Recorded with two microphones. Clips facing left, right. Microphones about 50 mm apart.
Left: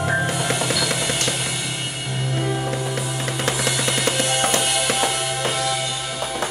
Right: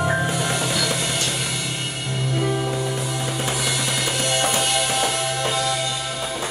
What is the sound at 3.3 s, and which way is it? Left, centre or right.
Music, left.